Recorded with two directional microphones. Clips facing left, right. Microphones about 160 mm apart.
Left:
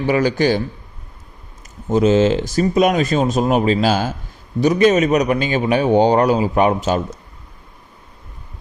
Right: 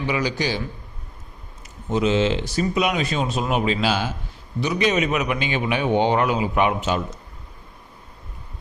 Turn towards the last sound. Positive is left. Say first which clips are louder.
# left 5 dB
turn(degrees=40)  # may be behind; listen again after turning